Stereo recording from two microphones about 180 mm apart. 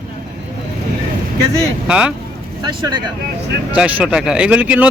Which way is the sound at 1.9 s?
5° right (ahead or behind).